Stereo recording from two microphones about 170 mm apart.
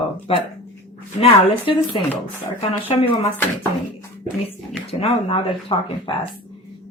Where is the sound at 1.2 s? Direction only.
35° left (ahead or behind).